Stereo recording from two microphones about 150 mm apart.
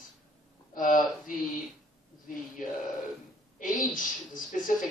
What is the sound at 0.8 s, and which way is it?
Speech, 65° left (ahead or behind).